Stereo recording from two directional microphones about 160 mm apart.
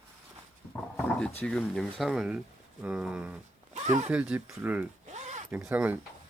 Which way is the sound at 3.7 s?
50° right (ahead or behind).